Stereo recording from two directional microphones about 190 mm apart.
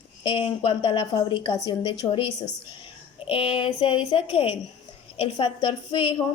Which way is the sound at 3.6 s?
30° left (ahead or behind).